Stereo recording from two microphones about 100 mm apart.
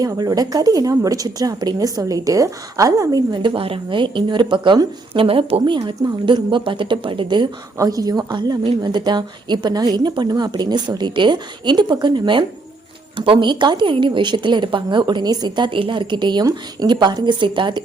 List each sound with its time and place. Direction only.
0.0 s a woman's voice: 40° right (ahead or behind)
3.4 s speech: 65° right (ahead or behind)
5.7 s a woman's voice: 35° right (ahead or behind)
6.2 s speech: 55° right (ahead or behind)
7.8 s a woman's voice: 40° right (ahead or behind)